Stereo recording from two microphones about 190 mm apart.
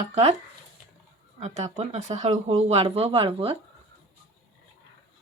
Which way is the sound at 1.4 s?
35° right (ahead or behind).